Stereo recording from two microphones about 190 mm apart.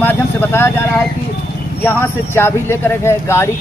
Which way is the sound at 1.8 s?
10° left (ahead or behind).